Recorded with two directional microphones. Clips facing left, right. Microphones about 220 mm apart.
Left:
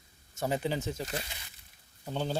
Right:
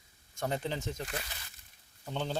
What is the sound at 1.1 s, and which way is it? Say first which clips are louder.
Speech: left 3 dB; 20° left (ahead or behind).